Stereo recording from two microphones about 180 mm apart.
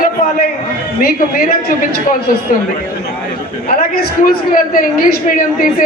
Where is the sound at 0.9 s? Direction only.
55° left (ahead or behind).